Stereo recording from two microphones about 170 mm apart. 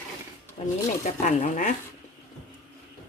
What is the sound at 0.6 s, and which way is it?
Speech, 35° left (ahead or behind).